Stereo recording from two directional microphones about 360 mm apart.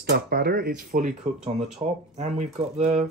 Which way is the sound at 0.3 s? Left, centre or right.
Right.